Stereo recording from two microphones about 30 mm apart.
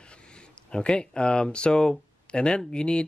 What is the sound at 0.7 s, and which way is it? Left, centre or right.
Speech, left.